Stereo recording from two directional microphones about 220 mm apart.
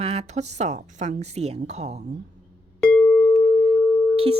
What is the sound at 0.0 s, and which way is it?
Speech, 30° right (ahead or behind).